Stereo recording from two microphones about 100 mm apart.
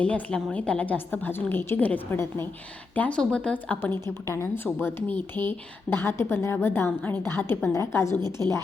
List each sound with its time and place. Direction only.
0.0 s a woman's voice: 15° left (ahead or behind)
4.0 s speech: 25° left (ahead or behind)